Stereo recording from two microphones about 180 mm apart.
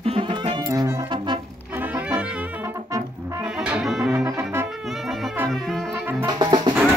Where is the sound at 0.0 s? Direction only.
30° right (ahead or behind).